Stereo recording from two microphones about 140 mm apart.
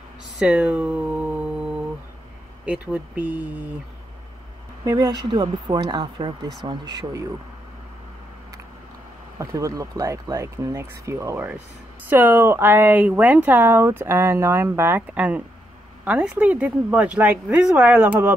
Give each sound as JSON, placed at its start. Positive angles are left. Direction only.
{"t": 0.4, "sound": "a sound", "side_deg": -10}
{"t": 2.6, "sound": "speech", "side_deg": -10}
{"t": 4.8, "sound": "speech", "side_deg": -25}
{"t": 9.4, "sound": "speech", "side_deg": -25}